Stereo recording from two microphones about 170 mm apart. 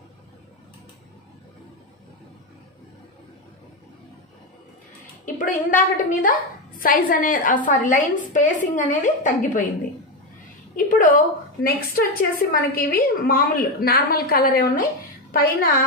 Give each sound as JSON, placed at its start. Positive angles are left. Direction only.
{"t": 5.2, "sound": "a woman's voice", "side_deg": 50}
{"t": 10.8, "sound": "a sound", "side_deg": 50}
{"t": 11.6, "sound": "a woman's voice", "side_deg": 60}